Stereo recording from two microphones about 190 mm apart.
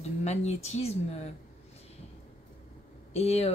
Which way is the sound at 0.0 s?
35° left (ahead or behind).